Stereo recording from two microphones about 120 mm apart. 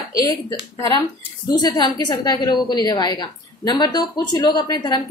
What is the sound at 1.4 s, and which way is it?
A woman's voice, 35° left (ahead or behind).